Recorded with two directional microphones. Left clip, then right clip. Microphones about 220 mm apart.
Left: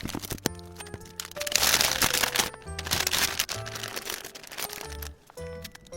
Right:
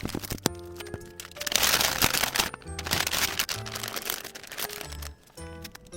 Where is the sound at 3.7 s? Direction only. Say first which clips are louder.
Right 1 dB; 20° right (ahead or behind).